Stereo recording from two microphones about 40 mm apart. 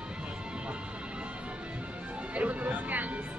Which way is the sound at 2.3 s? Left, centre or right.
Right.